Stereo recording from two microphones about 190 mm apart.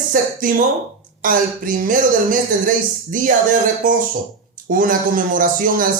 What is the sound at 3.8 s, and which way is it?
Speech, 45° right (ahead or behind).